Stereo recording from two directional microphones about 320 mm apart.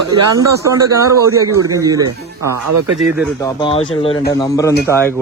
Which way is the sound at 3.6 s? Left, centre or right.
Centre.